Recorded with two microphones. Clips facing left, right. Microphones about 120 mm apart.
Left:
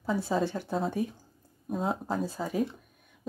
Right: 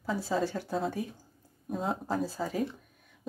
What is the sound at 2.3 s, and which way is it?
Speech, 15° left (ahead or behind).